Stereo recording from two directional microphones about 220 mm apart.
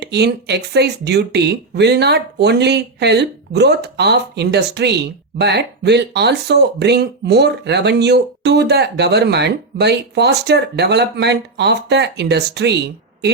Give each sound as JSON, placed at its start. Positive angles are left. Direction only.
{"t": 0.0, "sound": "speech", "side_deg": -50}